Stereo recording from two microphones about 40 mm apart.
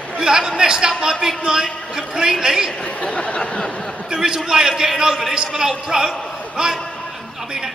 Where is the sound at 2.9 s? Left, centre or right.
Left.